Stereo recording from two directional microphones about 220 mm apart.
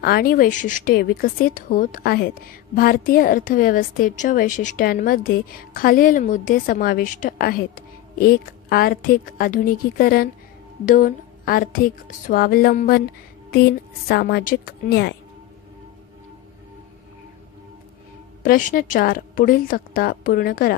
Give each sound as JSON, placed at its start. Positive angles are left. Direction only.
{"t": 0.0, "sound": "a woman's voice", "side_deg": 45}
{"t": 18.4, "sound": "a woman's voice", "side_deg": 35}